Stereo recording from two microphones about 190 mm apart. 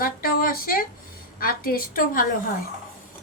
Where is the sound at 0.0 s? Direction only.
50° left (ahead or behind).